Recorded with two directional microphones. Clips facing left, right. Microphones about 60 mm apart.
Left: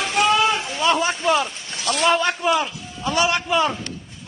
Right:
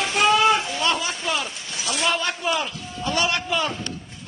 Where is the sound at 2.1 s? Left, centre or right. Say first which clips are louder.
Left 6 dB; left.